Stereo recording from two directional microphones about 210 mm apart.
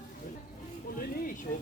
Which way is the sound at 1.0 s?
40° left (ahead or behind).